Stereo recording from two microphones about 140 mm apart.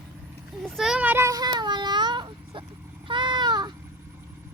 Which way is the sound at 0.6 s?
Centre (ahead or behind).